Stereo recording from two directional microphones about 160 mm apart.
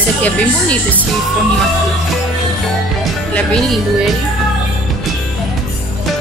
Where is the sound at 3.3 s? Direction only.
5° left (ahead or behind).